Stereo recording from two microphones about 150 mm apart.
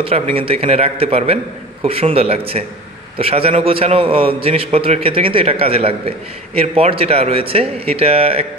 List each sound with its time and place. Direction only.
0.0 s a man's voice: 40° right (ahead or behind)